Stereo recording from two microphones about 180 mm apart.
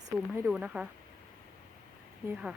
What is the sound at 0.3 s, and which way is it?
Speech, 5° right (ahead or behind).